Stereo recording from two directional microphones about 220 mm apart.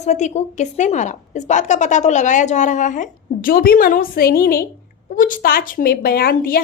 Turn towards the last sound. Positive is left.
turn(degrees=45)  # may be behind; listen again after turning